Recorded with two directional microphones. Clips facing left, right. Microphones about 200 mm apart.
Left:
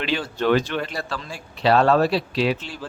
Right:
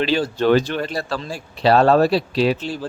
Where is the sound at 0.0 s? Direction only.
35° right (ahead or behind).